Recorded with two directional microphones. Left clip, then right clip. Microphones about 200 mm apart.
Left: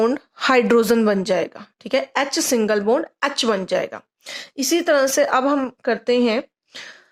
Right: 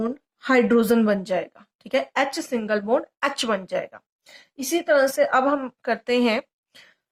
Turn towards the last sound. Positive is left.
turn(degrees=25)  # may be behind; listen again after turning